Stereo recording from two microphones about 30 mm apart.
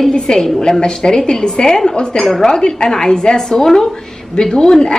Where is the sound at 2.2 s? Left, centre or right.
Centre.